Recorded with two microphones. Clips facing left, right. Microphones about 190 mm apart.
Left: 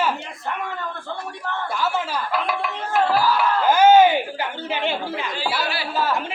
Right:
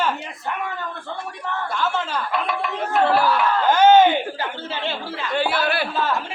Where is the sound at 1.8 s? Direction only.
5° left (ahead or behind).